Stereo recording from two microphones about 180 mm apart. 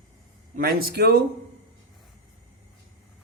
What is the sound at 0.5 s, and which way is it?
Speech, 60° right (ahead or behind).